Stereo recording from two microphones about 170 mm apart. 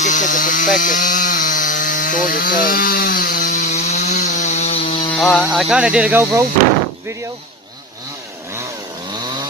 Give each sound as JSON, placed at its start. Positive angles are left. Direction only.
{"t": 0.0, "sound": "chainsaw", "side_deg": 45}
{"t": 5.1, "sound": "speech", "side_deg": 5}